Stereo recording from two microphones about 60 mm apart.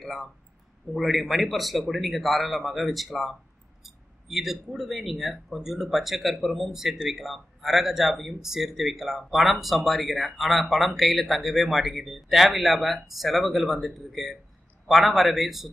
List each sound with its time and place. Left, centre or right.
0.0 s speech: centre